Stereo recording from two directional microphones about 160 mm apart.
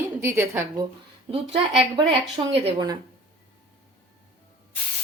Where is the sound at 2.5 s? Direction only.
40° right (ahead or behind).